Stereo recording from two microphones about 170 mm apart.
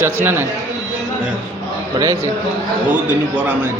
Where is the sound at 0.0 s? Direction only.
10° right (ahead or behind).